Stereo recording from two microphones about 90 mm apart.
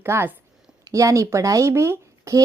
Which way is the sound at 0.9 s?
35° right (ahead or behind).